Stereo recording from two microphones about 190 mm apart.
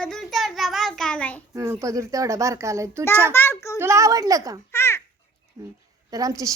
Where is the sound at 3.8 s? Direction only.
15° right (ahead or behind).